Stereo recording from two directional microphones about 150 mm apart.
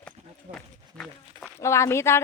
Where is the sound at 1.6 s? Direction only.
20° left (ahead or behind).